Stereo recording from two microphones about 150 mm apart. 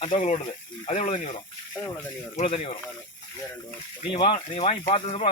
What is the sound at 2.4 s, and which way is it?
Speech, 45° left (ahead or behind).